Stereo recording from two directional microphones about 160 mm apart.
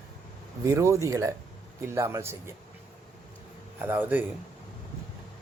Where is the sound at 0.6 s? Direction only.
20° right (ahead or behind).